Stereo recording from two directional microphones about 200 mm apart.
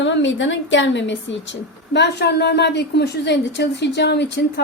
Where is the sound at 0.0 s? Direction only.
65° left (ahead or behind).